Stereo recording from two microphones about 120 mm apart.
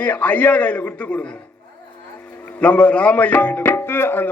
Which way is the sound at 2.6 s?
10° left (ahead or behind).